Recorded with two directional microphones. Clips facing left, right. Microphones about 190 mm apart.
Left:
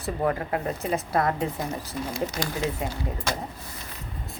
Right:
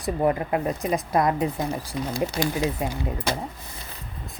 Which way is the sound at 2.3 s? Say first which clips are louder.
Right 4 dB; 30° right (ahead or behind).